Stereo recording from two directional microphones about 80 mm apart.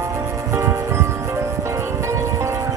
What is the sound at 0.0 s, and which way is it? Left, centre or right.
Music, right.